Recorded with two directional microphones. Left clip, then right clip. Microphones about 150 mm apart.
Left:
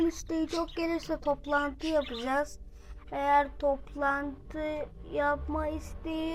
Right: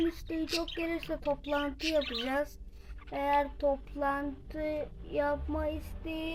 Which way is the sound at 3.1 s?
10° right (ahead or behind).